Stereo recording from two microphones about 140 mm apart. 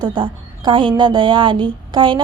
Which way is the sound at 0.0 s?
35° right (ahead or behind).